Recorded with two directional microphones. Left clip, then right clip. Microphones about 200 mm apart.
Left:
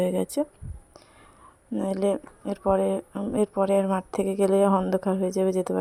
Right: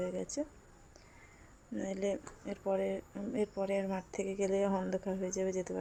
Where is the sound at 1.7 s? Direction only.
40° left (ahead or behind).